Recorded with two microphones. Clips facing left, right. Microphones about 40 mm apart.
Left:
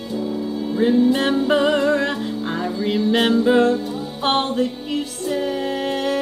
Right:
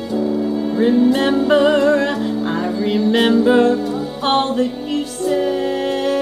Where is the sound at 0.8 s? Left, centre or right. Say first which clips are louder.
Right 2 dB; centre.